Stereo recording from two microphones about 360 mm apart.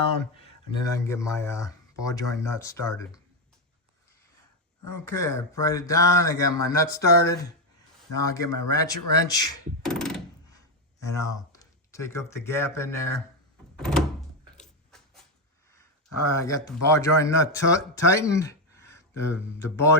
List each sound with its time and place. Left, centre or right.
0.9 s speech: centre
5.0 s speech: centre
13.7 s door: centre
16.3 s speech: centre